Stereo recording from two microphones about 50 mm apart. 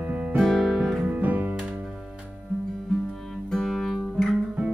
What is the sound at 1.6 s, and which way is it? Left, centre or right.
Music, right.